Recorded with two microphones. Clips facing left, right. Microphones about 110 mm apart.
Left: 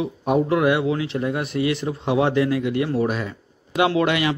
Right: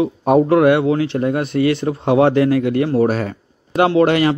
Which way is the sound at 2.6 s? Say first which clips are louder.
Right 6 dB; 40° right (ahead or behind).